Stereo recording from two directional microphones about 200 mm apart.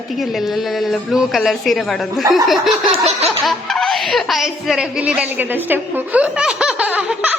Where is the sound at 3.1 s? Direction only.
30° right (ahead or behind).